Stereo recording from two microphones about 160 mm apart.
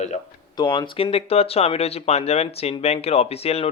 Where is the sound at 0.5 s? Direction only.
30° left (ahead or behind).